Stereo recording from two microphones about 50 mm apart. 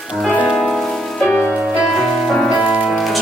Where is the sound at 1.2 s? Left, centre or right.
Left.